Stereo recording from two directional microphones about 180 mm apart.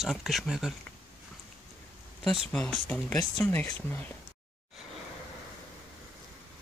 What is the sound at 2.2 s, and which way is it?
Speech, 5° left (ahead or behind).